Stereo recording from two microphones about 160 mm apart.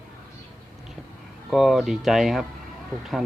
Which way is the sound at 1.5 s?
Centre (ahead or behind).